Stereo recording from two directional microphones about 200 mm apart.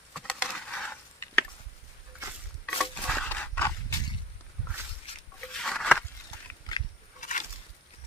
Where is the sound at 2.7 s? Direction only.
5° left (ahead or behind).